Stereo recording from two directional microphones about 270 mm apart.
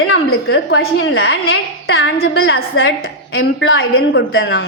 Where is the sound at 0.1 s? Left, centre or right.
Left.